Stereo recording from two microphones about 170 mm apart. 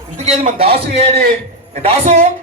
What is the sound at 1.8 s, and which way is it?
Speech, 40° right (ahead or behind).